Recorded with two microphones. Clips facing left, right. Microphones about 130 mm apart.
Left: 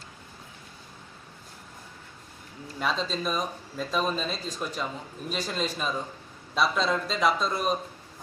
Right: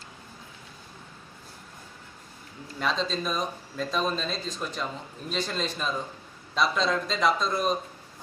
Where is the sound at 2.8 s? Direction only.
5° left (ahead or behind).